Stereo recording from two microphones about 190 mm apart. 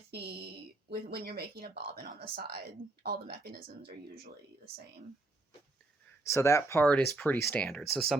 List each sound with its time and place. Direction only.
0.1 s a sound: 60° right (ahead or behind)
2.0 s speech: 55° right (ahead or behind)
3.6 s speech: 30° right (ahead or behind)
6.2 s speech: 15° left (ahead or behind)